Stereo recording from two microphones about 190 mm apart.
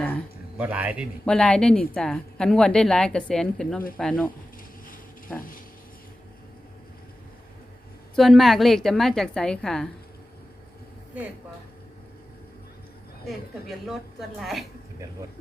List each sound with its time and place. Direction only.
0.5 s a man's voice: 10° right (ahead or behind)
1.2 s a woman's voice: 5° left (ahead or behind)
5.4 s speech: 45° left (ahead or behind)
8.1 s a woman's voice: centre (ahead or behind)
13.2 s a woman's voice: centre (ahead or behind)